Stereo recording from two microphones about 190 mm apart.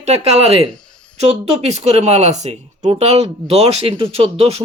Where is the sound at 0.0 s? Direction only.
35° right (ahead or behind).